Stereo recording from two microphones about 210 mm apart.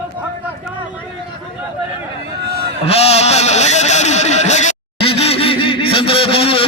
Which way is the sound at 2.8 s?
30° left (ahead or behind).